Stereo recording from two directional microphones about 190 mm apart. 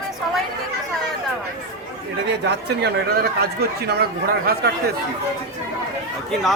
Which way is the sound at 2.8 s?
55° right (ahead or behind).